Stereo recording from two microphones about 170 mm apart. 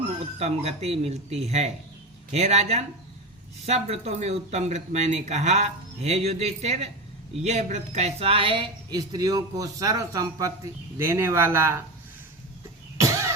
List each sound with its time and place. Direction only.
0.3 s speech: 40° right (ahead or behind); by 11.8 s 15° right (ahead or behind)
13.0 s vehicle: 20° right (ahead or behind)